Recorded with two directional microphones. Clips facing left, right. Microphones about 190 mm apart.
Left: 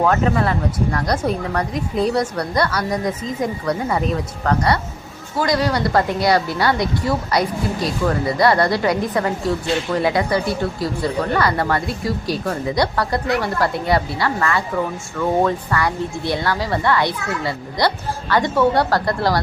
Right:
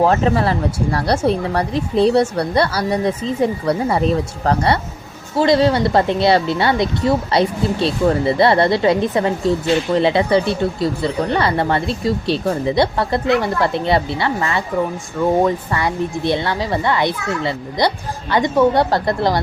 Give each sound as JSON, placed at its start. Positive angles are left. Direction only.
{"t": 0.0, "sound": "speech", "side_deg": -30}